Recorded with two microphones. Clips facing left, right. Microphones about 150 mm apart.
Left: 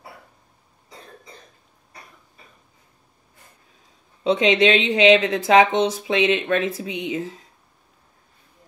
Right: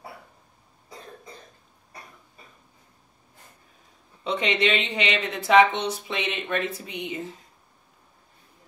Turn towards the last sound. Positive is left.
turn(degrees=90)